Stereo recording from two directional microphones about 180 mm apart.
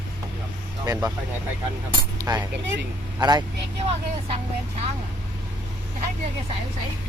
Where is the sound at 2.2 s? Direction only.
20° right (ahead or behind).